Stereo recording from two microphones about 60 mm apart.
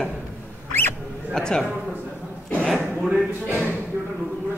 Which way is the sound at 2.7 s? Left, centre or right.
Right.